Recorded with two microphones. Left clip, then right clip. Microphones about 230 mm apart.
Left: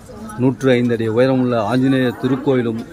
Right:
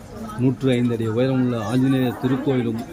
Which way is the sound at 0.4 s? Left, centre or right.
Centre.